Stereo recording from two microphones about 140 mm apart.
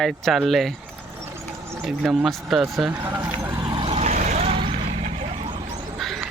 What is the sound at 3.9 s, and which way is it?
Vehicle, 60° right (ahead or behind).